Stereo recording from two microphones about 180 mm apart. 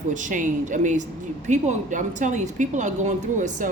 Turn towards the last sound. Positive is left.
turn(degrees=-45)  # may be behind; listen again after turning